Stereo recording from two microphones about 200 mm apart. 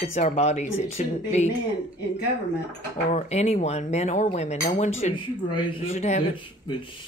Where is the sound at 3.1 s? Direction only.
35° left (ahead or behind).